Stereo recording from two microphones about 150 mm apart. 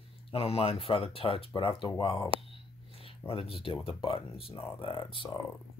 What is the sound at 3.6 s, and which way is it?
Speech, 35° left (ahead or behind).